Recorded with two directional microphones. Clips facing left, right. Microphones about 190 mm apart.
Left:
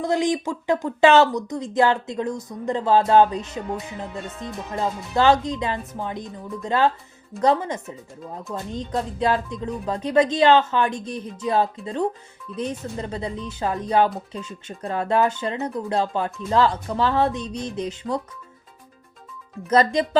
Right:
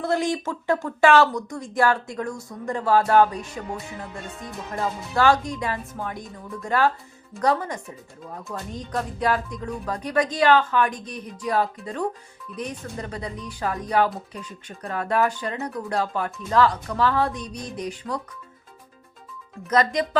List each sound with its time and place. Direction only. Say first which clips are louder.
0.0 s speech: left 2 dB; 15° left (ahead or behind)
4.7 s speech: left 2 dB; 20° left (ahead or behind)
19.7 s speech: left 3 dB; 30° left (ahead or behind)